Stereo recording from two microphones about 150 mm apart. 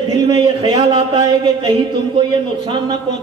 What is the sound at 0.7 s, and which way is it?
Speech, 35° right (ahead or behind).